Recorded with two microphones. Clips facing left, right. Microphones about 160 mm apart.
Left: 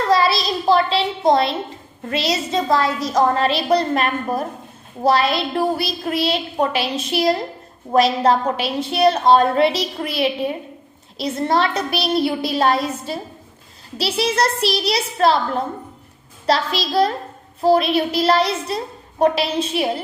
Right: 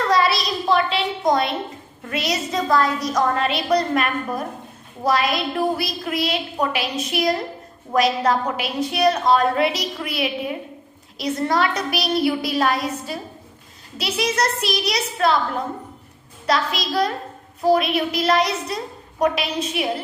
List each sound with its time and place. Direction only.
0.1 s a sound: 30° left (ahead or behind)
2.0 s a woman's voice: 30° left (ahead or behind)
14.2 s a woman's voice: 30° left (ahead or behind)
16.5 s a woman's voice: 30° left (ahead or behind)